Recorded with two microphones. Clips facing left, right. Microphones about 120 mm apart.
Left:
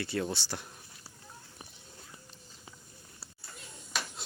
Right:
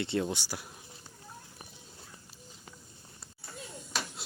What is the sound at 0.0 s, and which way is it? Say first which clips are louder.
Speech: right 2 dB; 20° right (ahead or behind).